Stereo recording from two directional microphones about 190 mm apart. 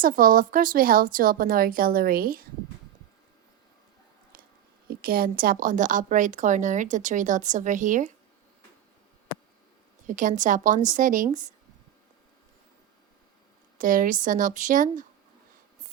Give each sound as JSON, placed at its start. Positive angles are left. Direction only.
{"t": 0.0, "sound": "a woman's voice", "side_deg": -45}
{"t": 4.9, "sound": "a woman's voice", "side_deg": -50}
{"t": 10.1, "sound": "a woman's voice", "side_deg": -40}
{"t": 13.7, "sound": "a woman's voice", "side_deg": -45}